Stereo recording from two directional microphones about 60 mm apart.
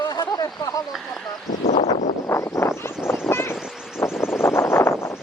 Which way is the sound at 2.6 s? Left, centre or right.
Left.